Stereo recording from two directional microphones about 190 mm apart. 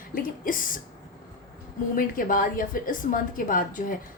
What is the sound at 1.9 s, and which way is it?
A woman's voice, 45° left (ahead or behind).